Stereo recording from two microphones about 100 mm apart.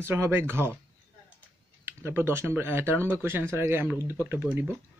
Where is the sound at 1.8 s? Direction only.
25° right (ahead or behind).